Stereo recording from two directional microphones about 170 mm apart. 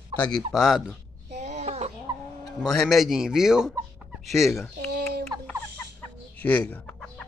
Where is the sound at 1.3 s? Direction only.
40° right (ahead or behind).